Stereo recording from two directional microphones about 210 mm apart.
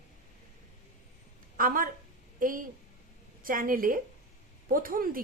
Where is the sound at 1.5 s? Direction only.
40° right (ahead or behind).